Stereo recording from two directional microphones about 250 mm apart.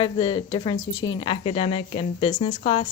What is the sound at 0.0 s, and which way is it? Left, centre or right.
A woman's voice, centre.